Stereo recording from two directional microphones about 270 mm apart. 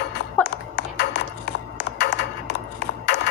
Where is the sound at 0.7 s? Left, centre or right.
Left.